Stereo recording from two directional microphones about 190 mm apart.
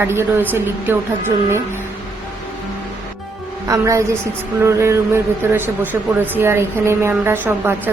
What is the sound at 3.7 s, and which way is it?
Speech, 15° right (ahead or behind).